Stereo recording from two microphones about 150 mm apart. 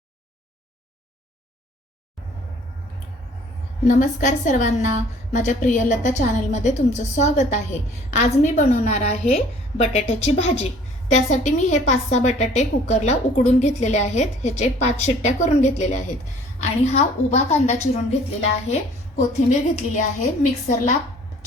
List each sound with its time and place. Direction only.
3.8 s a woman's voice: 55° left (ahead or behind)